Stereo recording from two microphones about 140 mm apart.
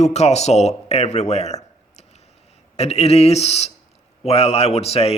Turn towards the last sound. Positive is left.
turn(degrees=45)  # may be behind; listen again after turning